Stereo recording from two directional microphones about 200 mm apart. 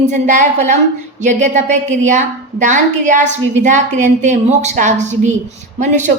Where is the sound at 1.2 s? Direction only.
35° right (ahead or behind).